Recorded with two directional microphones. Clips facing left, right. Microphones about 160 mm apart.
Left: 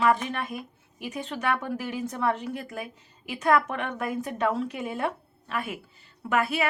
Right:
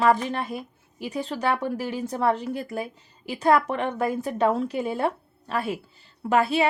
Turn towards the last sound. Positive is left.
turn(degrees=-30)  # may be behind; listen again after turning